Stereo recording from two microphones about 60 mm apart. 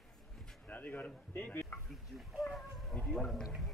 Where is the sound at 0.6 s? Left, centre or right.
Left.